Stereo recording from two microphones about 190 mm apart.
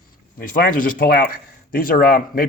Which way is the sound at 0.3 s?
45° left (ahead or behind).